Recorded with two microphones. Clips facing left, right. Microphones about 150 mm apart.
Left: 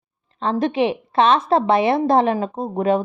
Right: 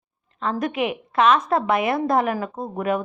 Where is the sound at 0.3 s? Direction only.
30° left (ahead or behind).